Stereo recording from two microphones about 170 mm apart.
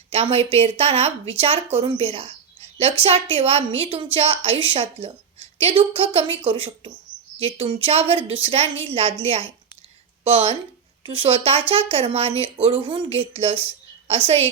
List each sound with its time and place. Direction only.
0.1 s a woman's voice: 35° right (ahead or behind)